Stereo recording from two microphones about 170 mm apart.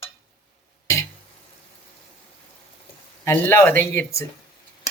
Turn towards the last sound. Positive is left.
turn(degrees=10)  # may be behind; listen again after turning